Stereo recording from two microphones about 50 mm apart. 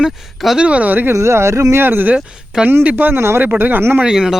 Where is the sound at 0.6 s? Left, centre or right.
Right.